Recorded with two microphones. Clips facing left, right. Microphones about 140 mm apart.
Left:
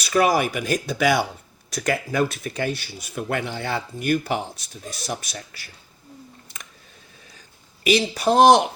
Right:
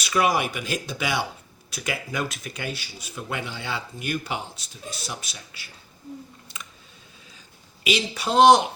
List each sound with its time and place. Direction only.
0.0 s speech: 40° left (ahead or behind)
7.9 s speech: 45° left (ahead or behind)